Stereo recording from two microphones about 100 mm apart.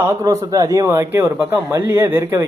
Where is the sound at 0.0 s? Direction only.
30° right (ahead or behind).